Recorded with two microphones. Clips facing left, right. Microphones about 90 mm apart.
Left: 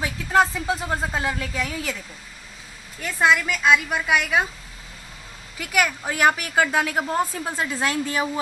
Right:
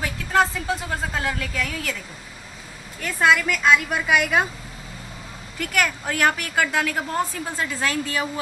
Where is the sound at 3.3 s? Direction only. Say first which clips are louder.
Right 1 dB; 5° left (ahead or behind).